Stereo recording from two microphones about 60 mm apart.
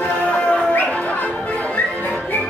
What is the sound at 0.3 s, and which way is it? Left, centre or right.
Music, centre.